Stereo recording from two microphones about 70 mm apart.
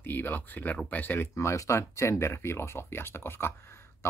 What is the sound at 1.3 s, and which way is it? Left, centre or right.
Speech, left.